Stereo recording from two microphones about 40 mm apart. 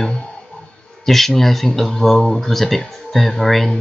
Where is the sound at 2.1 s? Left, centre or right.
Centre.